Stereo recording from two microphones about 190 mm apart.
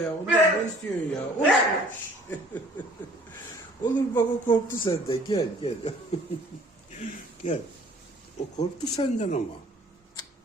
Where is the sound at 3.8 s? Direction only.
25° left (ahead or behind).